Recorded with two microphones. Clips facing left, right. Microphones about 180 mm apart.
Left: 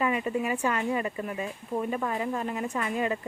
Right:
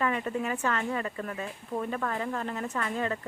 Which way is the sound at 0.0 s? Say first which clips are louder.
Left 2 dB; 10° left (ahead or behind).